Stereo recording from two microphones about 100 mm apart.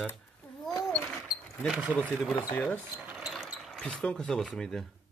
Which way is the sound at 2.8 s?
20° right (ahead or behind).